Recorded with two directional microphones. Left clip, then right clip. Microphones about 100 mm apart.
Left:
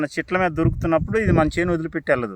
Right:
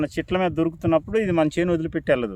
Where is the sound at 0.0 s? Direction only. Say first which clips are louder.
Left 2 dB; 10° right (ahead or behind).